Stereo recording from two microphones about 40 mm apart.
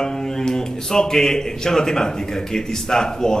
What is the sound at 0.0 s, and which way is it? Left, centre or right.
A man's voice, centre.